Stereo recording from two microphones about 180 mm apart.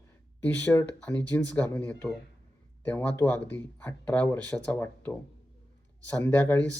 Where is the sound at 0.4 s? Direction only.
10° left (ahead or behind).